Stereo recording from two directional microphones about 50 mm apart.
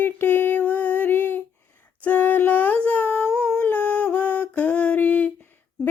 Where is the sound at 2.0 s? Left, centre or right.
Left.